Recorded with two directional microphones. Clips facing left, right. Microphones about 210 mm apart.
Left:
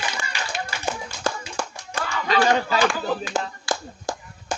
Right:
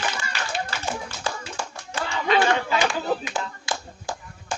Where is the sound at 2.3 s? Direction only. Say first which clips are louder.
Left 2 dB; 20° right (ahead or behind).